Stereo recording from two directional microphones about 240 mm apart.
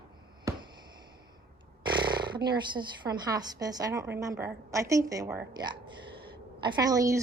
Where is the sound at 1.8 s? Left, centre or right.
Centre.